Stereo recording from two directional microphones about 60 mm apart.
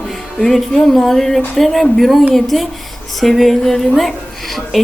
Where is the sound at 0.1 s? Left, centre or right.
Centre.